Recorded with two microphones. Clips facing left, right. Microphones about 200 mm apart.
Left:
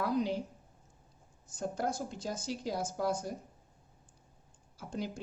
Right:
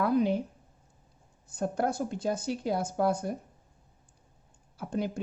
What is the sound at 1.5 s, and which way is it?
Speech, 60° right (ahead or behind).